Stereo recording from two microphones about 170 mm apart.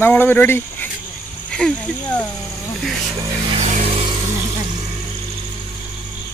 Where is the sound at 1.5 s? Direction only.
5° left (ahead or behind).